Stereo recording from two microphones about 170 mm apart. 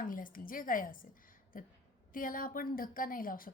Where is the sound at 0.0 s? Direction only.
55° left (ahead or behind).